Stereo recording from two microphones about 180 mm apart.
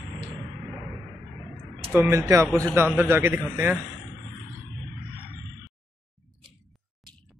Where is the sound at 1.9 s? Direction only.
15° right (ahead or behind).